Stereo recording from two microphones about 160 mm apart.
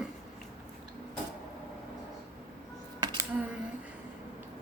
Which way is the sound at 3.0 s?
25° right (ahead or behind).